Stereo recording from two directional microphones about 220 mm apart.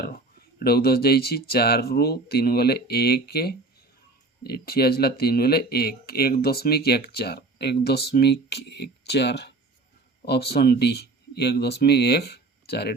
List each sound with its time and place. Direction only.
0.6 s speech: 45° left (ahead or behind)